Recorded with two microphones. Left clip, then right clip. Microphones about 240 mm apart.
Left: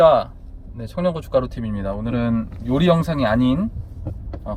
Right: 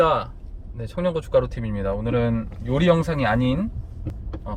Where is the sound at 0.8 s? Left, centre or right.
Left.